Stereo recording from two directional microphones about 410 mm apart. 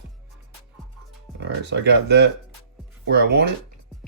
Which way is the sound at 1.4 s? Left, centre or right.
Right.